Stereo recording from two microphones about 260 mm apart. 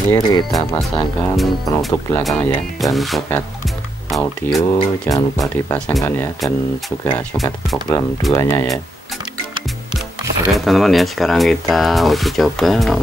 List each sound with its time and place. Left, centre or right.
0.1 s speech: centre
0.7 s speech: centre
10.5 s speech: centre